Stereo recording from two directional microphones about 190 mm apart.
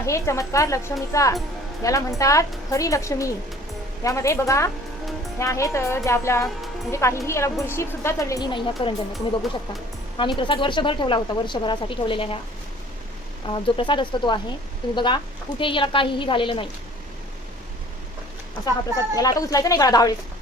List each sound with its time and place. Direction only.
0.0 s a woman's voice: 15° left (ahead or behind)
10.2 s a woman's voice: 25° left (ahead or behind)
13.5 s a woman's voice: 25° left (ahead or behind)
19.1 s a woman's voice: 20° left (ahead or behind)